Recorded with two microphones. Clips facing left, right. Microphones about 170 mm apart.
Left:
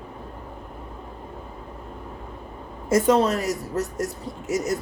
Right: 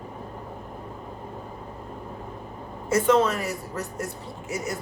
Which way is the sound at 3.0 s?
35° left (ahead or behind).